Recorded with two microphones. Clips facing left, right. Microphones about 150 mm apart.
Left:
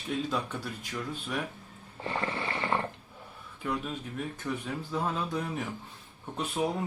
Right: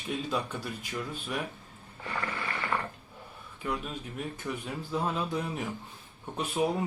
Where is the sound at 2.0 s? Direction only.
25° left (ahead or behind).